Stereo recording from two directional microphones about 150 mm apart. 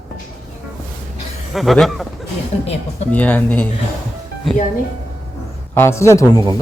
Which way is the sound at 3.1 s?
10° left (ahead or behind).